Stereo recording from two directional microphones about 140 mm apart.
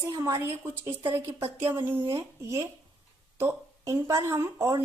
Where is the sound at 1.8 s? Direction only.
35° right (ahead or behind).